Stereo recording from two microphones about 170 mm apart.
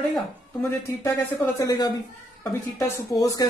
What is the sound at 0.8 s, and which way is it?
Speech, 20° left (ahead or behind).